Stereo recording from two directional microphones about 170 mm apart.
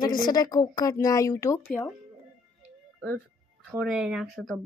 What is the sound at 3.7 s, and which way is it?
Speech, 5° right (ahead or behind).